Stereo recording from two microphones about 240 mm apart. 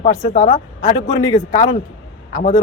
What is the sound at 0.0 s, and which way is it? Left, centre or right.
Speech, left.